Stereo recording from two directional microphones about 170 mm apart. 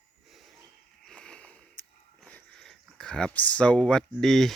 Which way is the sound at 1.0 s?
5° left (ahead or behind).